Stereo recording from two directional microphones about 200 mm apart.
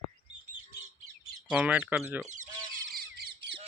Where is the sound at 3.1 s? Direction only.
55° right (ahead or behind).